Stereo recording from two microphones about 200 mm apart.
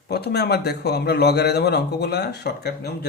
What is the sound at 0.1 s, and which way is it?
Speech, 55° left (ahead or behind).